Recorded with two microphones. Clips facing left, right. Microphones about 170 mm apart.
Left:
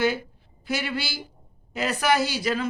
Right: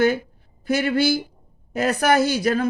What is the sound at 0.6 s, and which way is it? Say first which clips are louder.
Speech: right 9 dB; 50° right (ahead or behind).